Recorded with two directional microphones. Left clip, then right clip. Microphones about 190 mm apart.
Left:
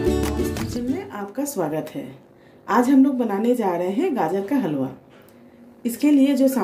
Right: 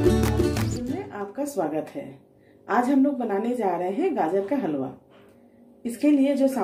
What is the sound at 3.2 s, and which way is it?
A woman's voice, 60° left (ahead or behind).